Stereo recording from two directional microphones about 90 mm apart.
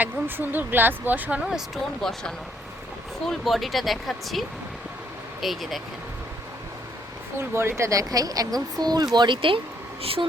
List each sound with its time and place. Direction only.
0.0 s speech: 20° right (ahead or behind)
1.5 s speech: 5° right (ahead or behind)
7.3 s speech: 25° right (ahead or behind); by 9.6 s 70° right (ahead or behind)
10.0 s speech: 90° right